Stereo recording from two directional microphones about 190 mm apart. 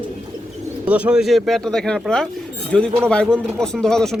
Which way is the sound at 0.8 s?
5° right (ahead or behind).